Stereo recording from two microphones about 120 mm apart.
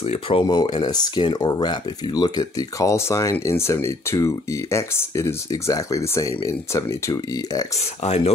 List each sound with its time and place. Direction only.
0.0 s speech: 55° left (ahead or behind)
0.5 s speech: 35° left (ahead or behind)